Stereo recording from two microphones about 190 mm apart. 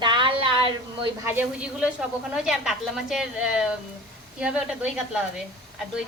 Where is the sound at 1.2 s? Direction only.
10° right (ahead or behind).